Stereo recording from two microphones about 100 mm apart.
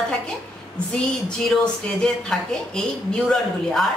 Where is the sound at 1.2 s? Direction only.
10° left (ahead or behind).